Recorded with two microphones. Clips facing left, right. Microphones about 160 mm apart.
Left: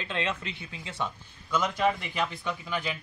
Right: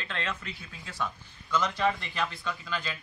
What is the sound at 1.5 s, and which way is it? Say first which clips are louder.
A man's voice: left 1 dB; 10° left (ahead or behind).